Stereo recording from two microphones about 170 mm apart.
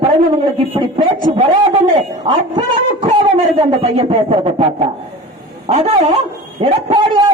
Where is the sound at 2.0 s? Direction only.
35° right (ahead or behind).